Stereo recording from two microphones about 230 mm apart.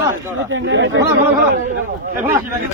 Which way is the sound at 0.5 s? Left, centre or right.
Right.